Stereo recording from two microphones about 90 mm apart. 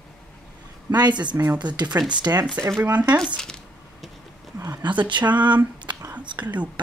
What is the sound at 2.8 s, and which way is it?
Speech, 20° right (ahead or behind).